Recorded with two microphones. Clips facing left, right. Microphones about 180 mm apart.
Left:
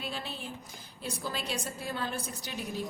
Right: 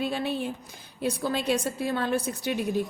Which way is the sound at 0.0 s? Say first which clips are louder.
Right 11 dB; 60° right (ahead or behind).